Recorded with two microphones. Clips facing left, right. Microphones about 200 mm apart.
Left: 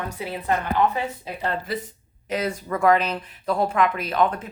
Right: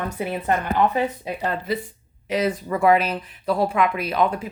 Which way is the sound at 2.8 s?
5° right (ahead or behind).